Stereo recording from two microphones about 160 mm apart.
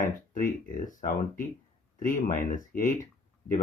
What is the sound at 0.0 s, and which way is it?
Speech, 55° left (ahead or behind).